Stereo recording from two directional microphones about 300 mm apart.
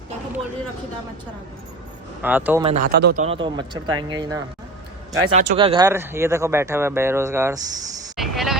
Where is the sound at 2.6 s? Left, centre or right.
Right.